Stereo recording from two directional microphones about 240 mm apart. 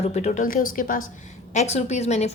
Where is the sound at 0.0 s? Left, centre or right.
Left.